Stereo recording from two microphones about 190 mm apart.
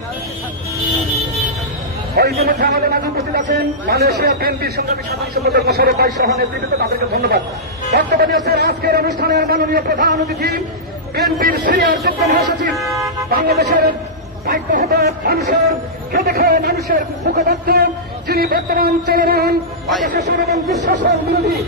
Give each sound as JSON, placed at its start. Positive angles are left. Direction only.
{"t": 2.1, "sound": "a man's voice", "side_deg": -55}